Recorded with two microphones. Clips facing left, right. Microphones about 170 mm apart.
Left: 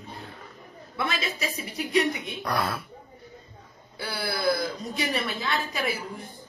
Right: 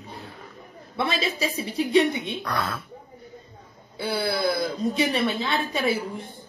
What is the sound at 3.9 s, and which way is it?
Speech, 25° right (ahead or behind).